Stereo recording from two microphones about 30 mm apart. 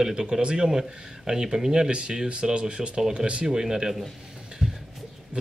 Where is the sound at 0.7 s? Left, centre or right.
Centre.